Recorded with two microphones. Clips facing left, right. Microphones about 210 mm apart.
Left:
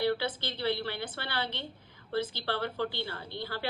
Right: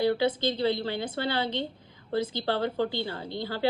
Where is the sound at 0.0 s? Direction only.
15° right (ahead or behind).